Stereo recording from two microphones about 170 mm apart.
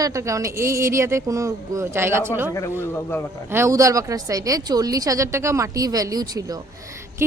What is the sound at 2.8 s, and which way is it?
Speech, 15° left (ahead or behind).